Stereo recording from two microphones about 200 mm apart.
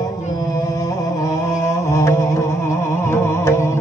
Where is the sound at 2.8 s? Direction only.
10° left (ahead or behind).